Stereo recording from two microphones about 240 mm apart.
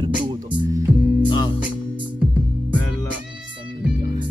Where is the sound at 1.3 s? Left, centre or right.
Centre.